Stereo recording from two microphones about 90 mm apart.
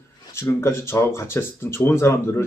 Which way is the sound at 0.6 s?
30° left (ahead or behind).